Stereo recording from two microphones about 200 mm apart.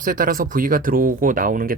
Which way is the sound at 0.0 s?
45° right (ahead or behind).